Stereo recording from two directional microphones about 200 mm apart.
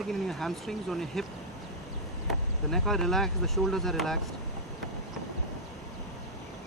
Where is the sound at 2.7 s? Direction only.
Centre (ahead or behind).